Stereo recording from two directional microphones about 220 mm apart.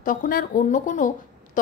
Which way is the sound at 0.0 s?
40° left (ahead or behind).